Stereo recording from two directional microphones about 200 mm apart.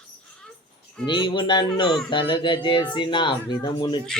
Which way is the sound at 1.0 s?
25° left (ahead or behind).